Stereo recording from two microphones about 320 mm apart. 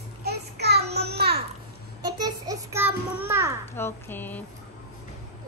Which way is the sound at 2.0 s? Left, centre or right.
Centre.